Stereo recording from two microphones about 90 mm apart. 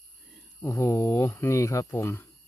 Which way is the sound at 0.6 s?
30° left (ahead or behind).